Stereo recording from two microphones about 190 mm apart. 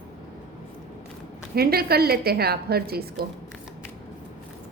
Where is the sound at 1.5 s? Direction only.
55° right (ahead or behind).